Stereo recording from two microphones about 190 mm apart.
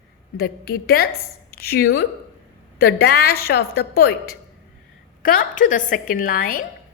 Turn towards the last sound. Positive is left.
turn(degrees=50)  # may be behind; listen again after turning